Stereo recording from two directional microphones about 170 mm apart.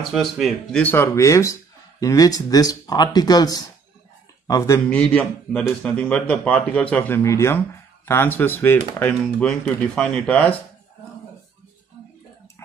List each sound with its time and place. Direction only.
0.1 s a man's voice: centre (ahead or behind)